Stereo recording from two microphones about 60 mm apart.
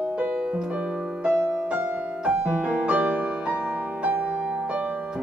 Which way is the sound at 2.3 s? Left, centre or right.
Right.